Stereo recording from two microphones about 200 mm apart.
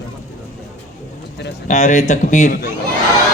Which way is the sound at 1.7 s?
35° left (ahead or behind).